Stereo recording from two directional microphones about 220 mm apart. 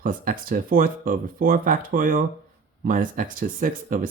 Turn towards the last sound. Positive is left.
turn(degrees=-40)  # may be behind; listen again after turning